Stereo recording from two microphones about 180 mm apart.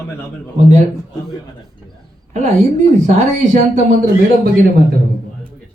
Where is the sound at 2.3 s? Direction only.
40° right (ahead or behind).